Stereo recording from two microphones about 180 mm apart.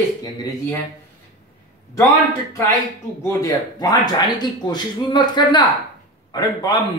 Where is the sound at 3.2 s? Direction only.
20° left (ahead or behind).